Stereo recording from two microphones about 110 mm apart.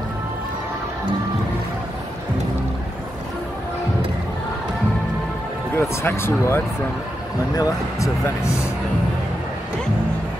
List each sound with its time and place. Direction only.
5.8 s speech: 20° left (ahead or behind)